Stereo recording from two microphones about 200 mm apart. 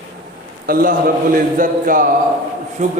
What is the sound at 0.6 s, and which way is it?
Music, 45° right (ahead or behind).